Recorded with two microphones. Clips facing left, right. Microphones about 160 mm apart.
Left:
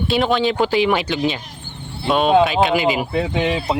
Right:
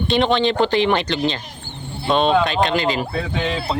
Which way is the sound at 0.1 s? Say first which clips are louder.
Right 1 dB; 5° left (ahead or behind).